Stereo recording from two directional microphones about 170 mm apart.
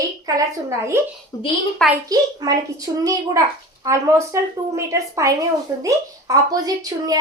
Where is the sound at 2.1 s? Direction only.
20° right (ahead or behind).